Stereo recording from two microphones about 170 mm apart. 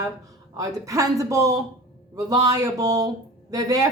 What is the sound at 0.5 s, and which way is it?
A woman's voice, 20° right (ahead or behind).